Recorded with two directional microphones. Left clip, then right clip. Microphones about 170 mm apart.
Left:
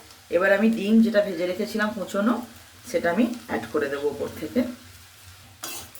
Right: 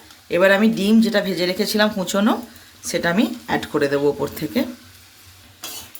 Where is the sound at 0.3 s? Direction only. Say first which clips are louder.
Right 5 dB; 90° right.